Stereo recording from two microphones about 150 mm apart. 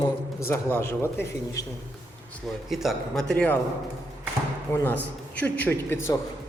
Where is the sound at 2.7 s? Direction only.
Centre (ahead or behind).